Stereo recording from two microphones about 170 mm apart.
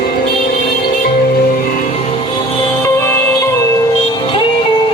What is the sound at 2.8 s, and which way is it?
Music, 15° left (ahead or behind).